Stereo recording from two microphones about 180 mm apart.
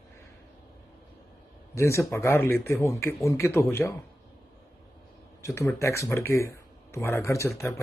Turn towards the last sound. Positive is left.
turn(degrees=15)  # may be behind; listen again after turning